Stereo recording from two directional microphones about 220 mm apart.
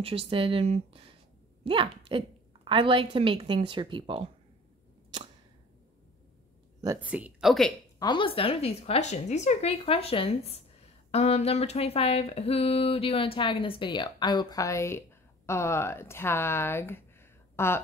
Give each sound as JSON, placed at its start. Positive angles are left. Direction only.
{"t": 0.0, "sound": "a woman's voice", "side_deg": -25}
{"t": 6.8, "sound": "speech", "side_deg": -10}
{"t": 8.0, "sound": "speech", "side_deg": 20}